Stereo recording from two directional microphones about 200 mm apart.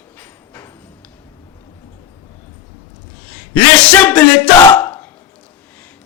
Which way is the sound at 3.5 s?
5° left (ahead or behind).